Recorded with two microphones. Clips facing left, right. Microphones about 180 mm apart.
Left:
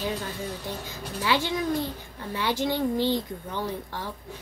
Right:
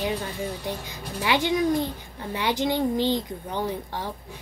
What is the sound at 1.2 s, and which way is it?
Speech, 20° right (ahead or behind).